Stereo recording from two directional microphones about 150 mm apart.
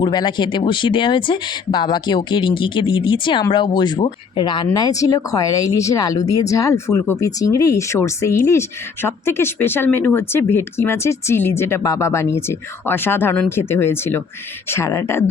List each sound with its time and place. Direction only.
0.0 s speech: 30° left (ahead or behind)